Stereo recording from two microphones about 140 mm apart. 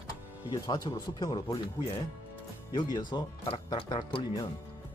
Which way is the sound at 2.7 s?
30° left (ahead or behind).